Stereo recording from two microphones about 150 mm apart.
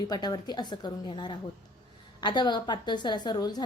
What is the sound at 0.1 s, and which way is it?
A woman's voice, 25° left (ahead or behind).